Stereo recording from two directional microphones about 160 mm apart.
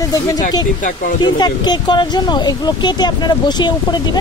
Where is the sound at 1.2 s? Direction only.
25° left (ahead or behind).